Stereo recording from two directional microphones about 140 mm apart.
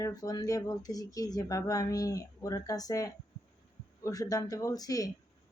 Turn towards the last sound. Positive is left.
turn(degrees=25)  # may be behind; listen again after turning